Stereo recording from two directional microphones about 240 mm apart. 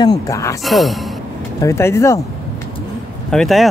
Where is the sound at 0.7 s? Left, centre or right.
Centre.